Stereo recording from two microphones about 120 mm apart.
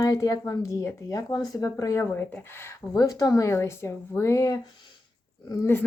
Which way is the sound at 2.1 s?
15° left (ahead or behind).